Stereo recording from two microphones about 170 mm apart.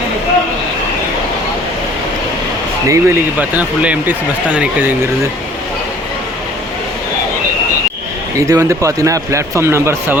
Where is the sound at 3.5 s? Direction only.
10° right (ahead or behind).